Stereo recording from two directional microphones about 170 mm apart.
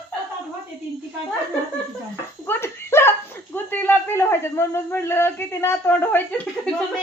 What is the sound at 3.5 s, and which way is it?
A man's voice, 10° left (ahead or behind).